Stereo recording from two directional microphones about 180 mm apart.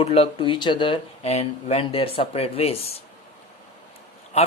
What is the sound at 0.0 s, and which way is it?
Speech, 35° left (ahead or behind).